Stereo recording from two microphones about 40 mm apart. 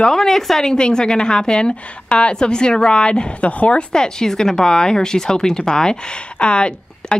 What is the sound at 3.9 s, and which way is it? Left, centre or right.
A woman's voice, centre.